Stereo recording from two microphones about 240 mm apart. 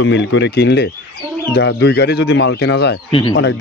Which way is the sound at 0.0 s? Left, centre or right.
Left.